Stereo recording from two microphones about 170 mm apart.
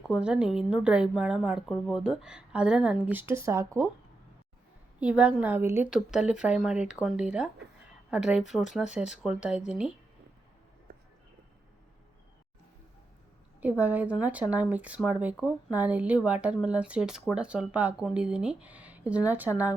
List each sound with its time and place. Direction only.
0.1 s a woman's voice: 5° right (ahead or behind)
4.9 s a woman's voice: 5° right (ahead or behind)
10.9 s a sound: 65° right (ahead or behind)
13.6 s speech: 10° right (ahead or behind)